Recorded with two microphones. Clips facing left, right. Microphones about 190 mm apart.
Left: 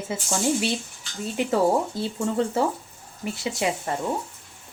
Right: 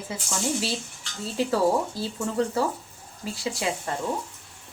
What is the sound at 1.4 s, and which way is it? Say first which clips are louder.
Speech: left 1 dB; 20° left (ahead or behind).